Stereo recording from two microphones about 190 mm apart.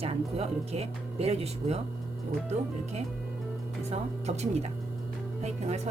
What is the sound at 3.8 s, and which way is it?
Speech, 35° right (ahead or behind).